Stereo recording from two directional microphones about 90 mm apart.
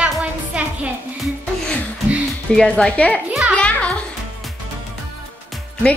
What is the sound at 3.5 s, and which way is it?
Music, 10° left (ahead or behind).